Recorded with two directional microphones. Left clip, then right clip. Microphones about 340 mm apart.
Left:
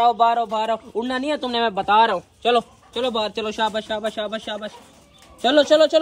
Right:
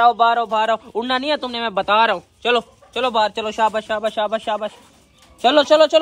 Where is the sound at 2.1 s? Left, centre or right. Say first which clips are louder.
Right 1 dB; centre.